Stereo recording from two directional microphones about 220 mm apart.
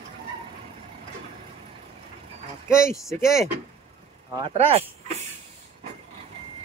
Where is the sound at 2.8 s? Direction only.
15° left (ahead or behind).